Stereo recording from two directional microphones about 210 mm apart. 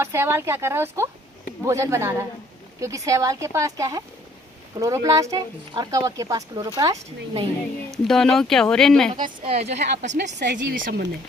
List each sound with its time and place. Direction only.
0.0 s speech: 10° right (ahead or behind)
8.0 s speech: centre (ahead or behind)
9.2 s a woman's voice: 25° right (ahead or behind)
10.4 s speech: 50° right (ahead or behind)